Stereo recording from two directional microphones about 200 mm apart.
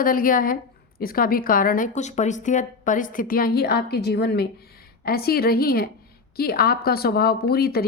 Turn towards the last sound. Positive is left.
turn(degrees=50)  # may be behind; listen again after turning